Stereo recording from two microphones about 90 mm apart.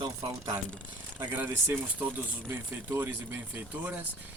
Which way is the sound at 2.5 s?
30° right (ahead or behind).